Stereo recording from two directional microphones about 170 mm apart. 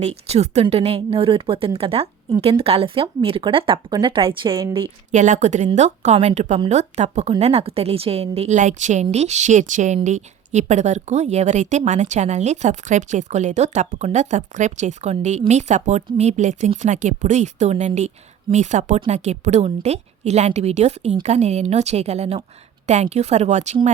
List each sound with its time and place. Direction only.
0.0 s a woman's voice: 40° right (ahead or behind)
5.1 s a woman's voice: 45° right (ahead or behind)